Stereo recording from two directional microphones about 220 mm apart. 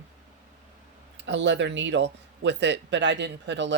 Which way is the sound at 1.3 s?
55° right (ahead or behind).